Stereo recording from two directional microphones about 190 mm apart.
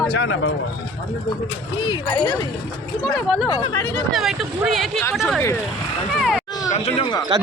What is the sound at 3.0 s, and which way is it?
Speech, centre (ahead or behind).